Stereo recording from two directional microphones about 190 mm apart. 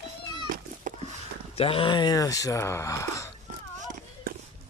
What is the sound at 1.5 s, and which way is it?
Speech, 30° left (ahead or behind).